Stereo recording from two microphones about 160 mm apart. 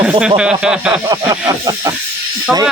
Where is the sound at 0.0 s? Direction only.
5° right (ahead or behind).